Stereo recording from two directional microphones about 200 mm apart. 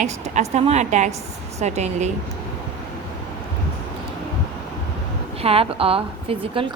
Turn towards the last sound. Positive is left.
turn(degrees=-25)  # may be behind; listen again after turning